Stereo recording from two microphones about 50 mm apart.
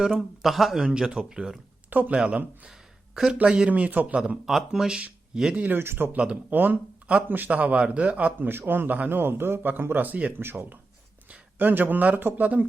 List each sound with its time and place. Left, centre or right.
0.1 s speech: centre
0.8 s speech: centre
1.9 s speech: right
2.1 s a man's voice: centre
3.4 s speech: centre
3.7 s a man's voice: right
4.4 s speech: centre
5.7 s a man's voice: right
6.1 s a man's voice: right
6.5 s a man's voice: right
8.4 s a man's voice: right
10.3 s a man's voice: right